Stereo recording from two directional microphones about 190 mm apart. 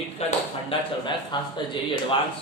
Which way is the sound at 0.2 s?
30° left (ahead or behind).